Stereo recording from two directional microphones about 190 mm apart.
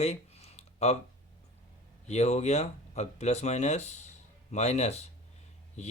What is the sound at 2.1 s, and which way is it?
Speech, 35° left (ahead or behind).